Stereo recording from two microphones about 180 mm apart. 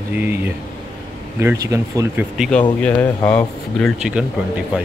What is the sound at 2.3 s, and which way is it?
Speech, centre (ahead or behind).